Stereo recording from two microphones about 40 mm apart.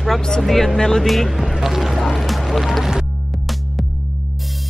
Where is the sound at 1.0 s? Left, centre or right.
Centre.